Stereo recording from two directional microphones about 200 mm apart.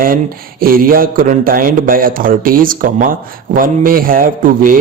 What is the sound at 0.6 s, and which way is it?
Speech, 45° right (ahead or behind).